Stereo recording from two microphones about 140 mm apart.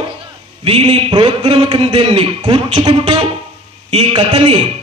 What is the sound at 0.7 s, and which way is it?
A man's voice, 40° right (ahead or behind).